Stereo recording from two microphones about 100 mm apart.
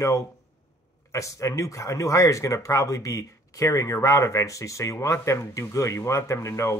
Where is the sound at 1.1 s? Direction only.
35° left (ahead or behind).